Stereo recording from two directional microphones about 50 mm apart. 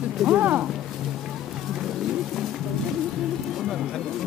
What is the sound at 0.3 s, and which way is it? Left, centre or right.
Speech, right.